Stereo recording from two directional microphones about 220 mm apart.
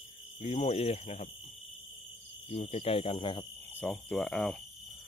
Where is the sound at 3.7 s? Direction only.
5° left (ahead or behind).